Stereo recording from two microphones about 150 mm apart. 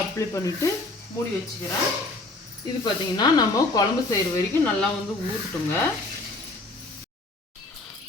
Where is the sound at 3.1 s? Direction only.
25° left (ahead or behind).